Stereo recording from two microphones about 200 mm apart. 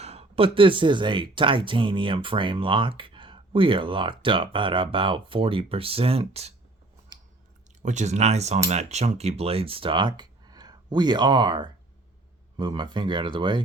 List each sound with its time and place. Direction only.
0.0 s speech: 30° right (ahead or behind)
7.8 s speech: 35° right (ahead or behind)